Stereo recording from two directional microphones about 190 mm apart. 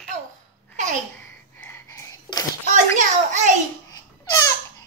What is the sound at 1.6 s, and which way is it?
Whispering, 15° left (ahead or behind).